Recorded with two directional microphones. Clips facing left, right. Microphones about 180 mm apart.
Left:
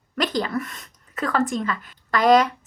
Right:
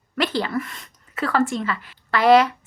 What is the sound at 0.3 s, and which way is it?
Speech, 45° left (ahead or behind).